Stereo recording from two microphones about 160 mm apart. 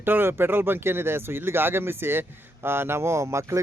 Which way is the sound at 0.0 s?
15° right (ahead or behind).